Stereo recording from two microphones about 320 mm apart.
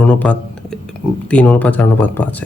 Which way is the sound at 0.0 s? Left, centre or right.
Centre.